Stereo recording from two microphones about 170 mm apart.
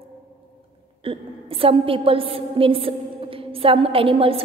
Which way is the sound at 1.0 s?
35° right (ahead or behind).